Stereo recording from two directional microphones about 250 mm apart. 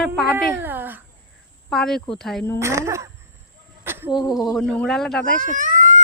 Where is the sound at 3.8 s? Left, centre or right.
Centre.